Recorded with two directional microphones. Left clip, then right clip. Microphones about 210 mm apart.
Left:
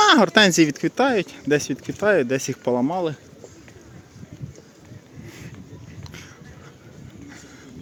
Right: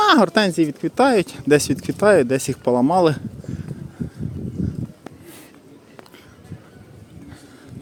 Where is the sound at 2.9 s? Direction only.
40° right (ahead or behind).